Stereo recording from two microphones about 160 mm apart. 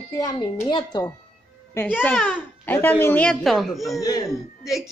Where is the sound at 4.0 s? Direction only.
20° left (ahead or behind).